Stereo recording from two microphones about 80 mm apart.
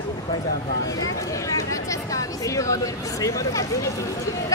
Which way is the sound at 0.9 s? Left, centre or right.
Left.